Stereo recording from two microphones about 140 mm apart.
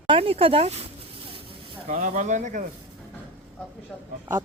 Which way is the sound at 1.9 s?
65° right (ahead or behind).